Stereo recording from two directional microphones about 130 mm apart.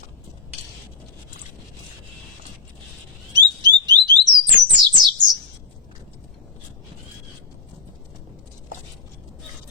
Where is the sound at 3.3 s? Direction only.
30° right (ahead or behind).